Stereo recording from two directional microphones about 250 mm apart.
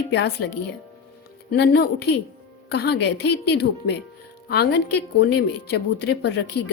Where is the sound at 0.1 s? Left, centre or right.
Left.